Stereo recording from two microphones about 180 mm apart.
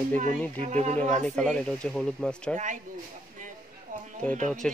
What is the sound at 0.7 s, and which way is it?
Speech, 40° right (ahead or behind).